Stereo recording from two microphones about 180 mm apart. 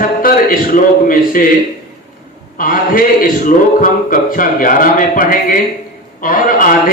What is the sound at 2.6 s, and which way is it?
A man's voice, 50° left (ahead or behind).